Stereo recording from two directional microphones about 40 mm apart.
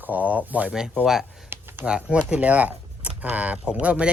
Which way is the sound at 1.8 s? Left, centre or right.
Right.